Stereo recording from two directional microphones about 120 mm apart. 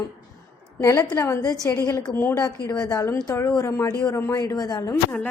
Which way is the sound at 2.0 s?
15° left (ahead or behind).